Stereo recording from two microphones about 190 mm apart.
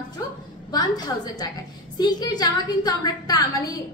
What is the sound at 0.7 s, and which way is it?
A woman's voice, 20° left (ahead or behind).